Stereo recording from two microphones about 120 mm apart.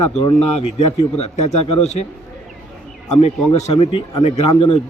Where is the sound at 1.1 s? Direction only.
70° left (ahead or behind).